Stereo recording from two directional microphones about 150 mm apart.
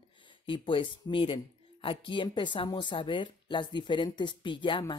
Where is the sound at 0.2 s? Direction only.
35° left (ahead or behind).